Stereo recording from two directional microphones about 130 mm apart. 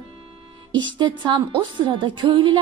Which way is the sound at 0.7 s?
35° right (ahead or behind).